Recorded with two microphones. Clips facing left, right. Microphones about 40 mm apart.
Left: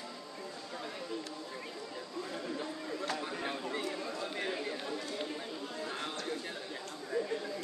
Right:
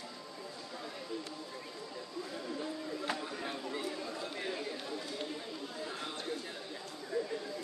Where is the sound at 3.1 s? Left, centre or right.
Centre.